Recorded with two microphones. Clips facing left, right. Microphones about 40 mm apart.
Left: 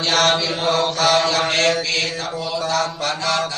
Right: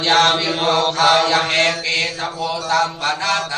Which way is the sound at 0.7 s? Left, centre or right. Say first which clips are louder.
Right 3 dB; right.